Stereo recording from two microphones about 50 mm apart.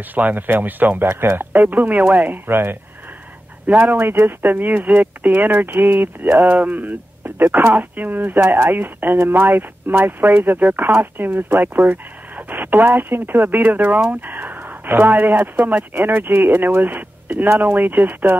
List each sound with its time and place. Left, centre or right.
0.1 s speech: right
3.6 s speech: right
3.9 s speech: right
8.5 s speech: right
10.9 s speech: right
14.2 s a sound: right
15.4 s speech: right